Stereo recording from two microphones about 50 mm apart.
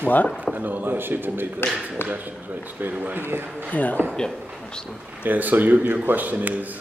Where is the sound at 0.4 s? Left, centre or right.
Right.